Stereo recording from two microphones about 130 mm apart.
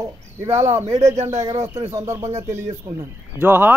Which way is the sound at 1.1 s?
60° right (ahead or behind).